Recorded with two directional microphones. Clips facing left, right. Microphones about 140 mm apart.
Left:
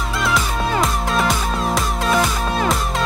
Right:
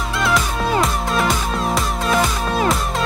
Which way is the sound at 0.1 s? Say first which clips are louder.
Right 1 dB; centre (ahead or behind).